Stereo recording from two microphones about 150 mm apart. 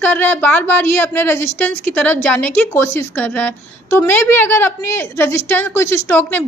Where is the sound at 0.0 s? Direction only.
15° left (ahead or behind).